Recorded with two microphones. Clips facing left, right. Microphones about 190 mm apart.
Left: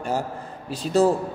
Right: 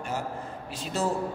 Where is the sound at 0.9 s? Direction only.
35° left (ahead or behind).